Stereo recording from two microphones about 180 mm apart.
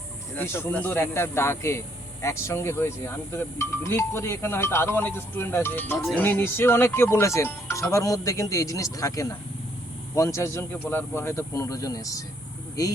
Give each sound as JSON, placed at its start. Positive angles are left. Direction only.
{"t": 0.3, "sound": "speech", "side_deg": 10}